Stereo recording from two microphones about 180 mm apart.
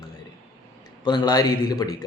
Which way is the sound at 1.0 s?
25° left (ahead or behind).